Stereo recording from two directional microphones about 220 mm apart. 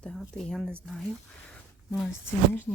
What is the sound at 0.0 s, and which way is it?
Speech, centre (ahead or behind).